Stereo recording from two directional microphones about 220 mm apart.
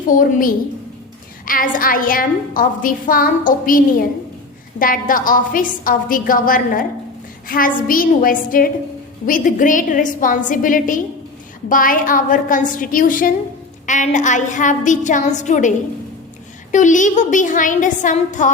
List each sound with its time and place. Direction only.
0.1 s a woman's voice: 40° left (ahead or behind)
16.7 s a woman's voice: 35° left (ahead or behind)